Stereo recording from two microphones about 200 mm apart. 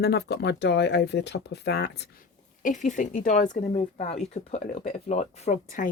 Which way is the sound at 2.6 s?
40° left (ahead or behind).